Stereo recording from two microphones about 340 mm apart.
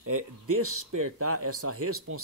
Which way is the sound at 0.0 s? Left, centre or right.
Right.